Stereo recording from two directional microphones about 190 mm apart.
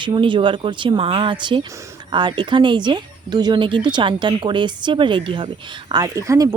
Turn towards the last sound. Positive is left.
turn(degrees=-15)  # may be behind; listen again after turning